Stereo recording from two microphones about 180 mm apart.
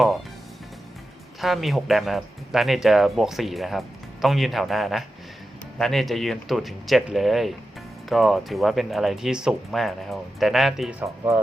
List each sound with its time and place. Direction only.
1.4 s speech: centre (ahead or behind)